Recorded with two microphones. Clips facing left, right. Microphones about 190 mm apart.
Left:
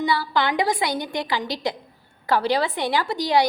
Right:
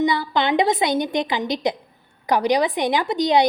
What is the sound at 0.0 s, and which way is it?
A woman's voice, 20° right (ahead or behind).